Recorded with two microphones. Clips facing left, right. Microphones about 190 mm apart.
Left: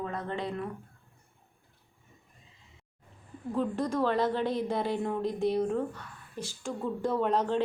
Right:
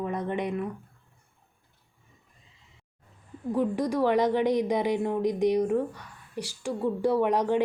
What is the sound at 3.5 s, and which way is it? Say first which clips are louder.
Speech: right 4 dB; 10° right (ahead or behind).